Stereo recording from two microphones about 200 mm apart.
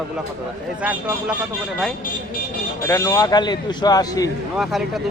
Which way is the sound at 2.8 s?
15° left (ahead or behind).